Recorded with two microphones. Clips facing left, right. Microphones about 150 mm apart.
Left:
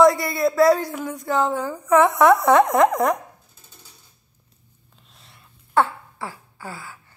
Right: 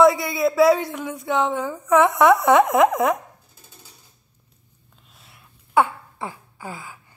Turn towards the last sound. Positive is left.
turn(degrees=-15)  # may be behind; listen again after turning